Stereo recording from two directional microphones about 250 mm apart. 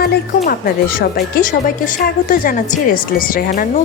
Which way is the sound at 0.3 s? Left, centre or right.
Left.